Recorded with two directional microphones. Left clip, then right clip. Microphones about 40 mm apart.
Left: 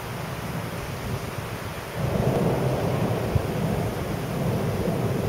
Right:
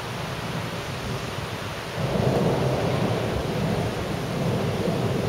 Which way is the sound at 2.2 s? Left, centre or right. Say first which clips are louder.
Right 1 dB; right.